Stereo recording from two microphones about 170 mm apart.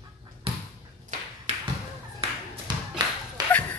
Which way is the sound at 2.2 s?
35° right (ahead or behind).